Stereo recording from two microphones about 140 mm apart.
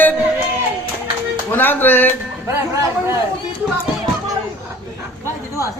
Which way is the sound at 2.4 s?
20° right (ahead or behind).